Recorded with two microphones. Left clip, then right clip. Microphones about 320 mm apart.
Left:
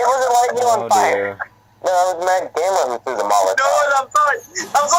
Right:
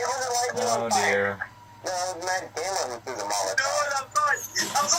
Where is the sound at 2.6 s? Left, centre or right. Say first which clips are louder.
Left 12 dB; left.